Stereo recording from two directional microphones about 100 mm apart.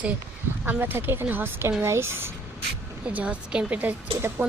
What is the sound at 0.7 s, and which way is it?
Speech, 20° right (ahead or behind).